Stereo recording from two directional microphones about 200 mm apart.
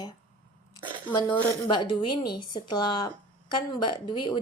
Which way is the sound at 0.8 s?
25° right (ahead or behind).